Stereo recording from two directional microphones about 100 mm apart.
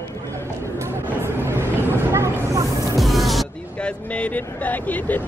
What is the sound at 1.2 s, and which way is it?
Vehicle, 25° right (ahead or behind).